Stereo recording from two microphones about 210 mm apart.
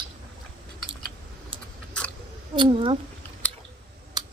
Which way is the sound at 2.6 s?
25° right (ahead or behind).